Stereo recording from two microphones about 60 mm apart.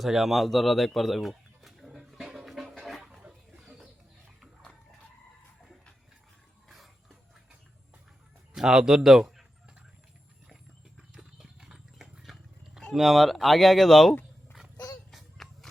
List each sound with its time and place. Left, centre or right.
0.0 s bird: centre
3.2 s a sound: centre
6.7 s dog: centre
8.5 s speech: centre
11.1 s horse: centre
12.2 s a sound: centre
12.9 s speech: centre
15.1 s music: centre